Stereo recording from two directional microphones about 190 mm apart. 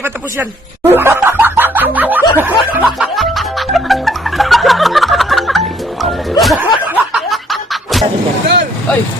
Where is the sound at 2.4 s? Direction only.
10° right (ahead or behind).